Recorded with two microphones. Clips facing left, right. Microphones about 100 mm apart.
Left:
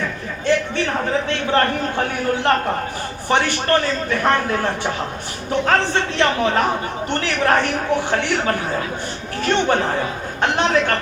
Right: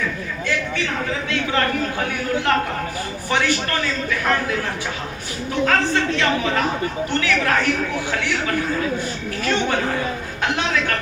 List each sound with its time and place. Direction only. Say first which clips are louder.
0.8 s a man's voice: left 4 dB; 40° left (ahead or behind)
3.2 s a man's voice: left 4 dB; 50° left (ahead or behind)
5.6 s a man's voice: even; 30° left (ahead or behind)
7.1 s a man's voice: left 3 dB; 45° left (ahead or behind)